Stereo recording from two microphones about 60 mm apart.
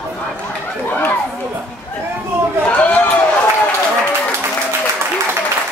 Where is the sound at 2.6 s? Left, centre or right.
Left.